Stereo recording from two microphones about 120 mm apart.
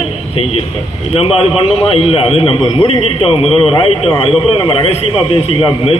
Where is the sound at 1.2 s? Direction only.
55° left (ahead or behind).